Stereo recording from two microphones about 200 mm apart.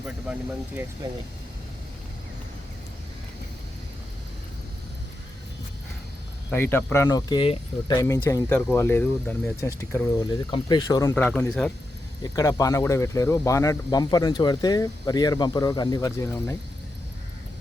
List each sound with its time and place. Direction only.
6.5 s speech: 10° left (ahead or behind)
12.2 s speech: 15° left (ahead or behind)